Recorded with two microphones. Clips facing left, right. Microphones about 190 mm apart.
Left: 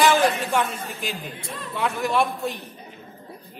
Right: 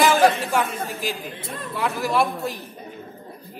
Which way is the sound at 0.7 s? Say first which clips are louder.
Right 4 dB; 55° right (ahead or behind).